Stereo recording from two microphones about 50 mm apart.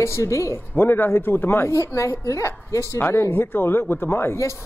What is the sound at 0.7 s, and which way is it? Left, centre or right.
Speech, left.